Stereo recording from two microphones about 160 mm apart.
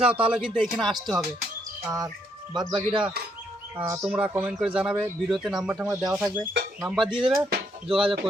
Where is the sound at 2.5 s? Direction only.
25° right (ahead or behind).